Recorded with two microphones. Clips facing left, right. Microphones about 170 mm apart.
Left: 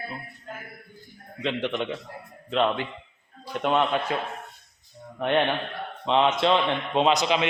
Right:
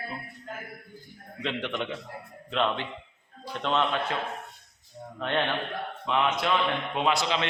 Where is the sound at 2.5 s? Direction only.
5° left (ahead or behind).